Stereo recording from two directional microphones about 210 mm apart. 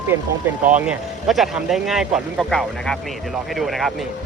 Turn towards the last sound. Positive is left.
turn(degrees=0)  # may be behind; listen again after turning